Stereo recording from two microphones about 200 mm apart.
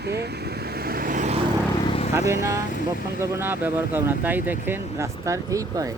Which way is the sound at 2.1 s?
15° right (ahead or behind).